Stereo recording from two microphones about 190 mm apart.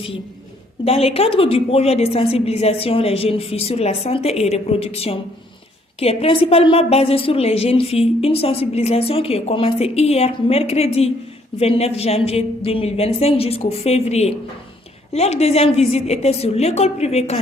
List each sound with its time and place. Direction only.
0.9 s a woman's voice: 30° left (ahead or behind)